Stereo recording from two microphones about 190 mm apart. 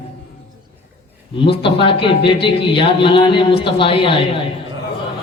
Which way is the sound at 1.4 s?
25° left (ahead or behind).